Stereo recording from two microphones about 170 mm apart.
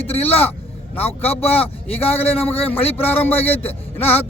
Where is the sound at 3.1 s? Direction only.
10° left (ahead or behind).